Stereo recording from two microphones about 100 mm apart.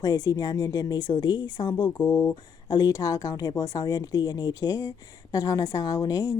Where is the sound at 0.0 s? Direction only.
40° left (ahead or behind).